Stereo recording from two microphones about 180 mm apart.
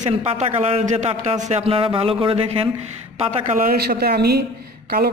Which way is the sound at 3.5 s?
55° right (ahead or behind).